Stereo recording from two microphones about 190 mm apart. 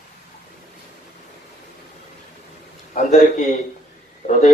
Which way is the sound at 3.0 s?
40° left (ahead or behind).